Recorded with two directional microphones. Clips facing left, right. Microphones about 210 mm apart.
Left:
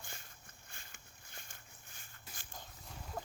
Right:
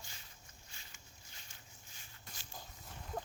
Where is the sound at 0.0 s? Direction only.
50° left (ahead or behind).